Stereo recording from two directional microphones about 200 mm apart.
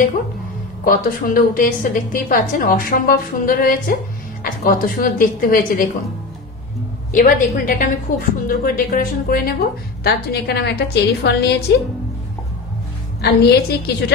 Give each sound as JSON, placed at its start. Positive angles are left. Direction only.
{"t": 0.8, "sound": "a woman's voice", "side_deg": 45}
{"t": 7.1, "sound": "a woman's voice", "side_deg": 40}
{"t": 13.2, "sound": "a woman's voice", "side_deg": 55}